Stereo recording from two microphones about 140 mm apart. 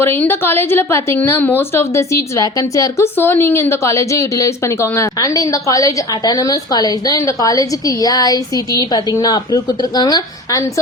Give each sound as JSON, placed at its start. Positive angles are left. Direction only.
{"t": 0.0, "sound": "a woman's voice", "side_deg": 15}